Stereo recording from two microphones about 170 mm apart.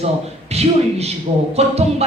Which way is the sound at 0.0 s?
40° right (ahead or behind).